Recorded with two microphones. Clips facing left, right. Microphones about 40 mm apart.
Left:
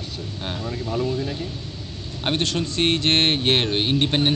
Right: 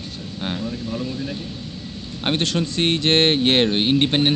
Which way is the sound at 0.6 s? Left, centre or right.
Left.